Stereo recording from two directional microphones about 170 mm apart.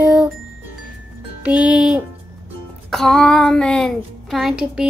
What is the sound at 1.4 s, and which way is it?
Speech, 5° right (ahead or behind).